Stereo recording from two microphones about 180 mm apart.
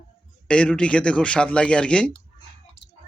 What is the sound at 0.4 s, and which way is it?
Speech, 5° left (ahead or behind).